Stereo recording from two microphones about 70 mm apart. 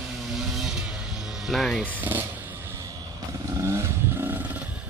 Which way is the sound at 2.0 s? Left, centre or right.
Right.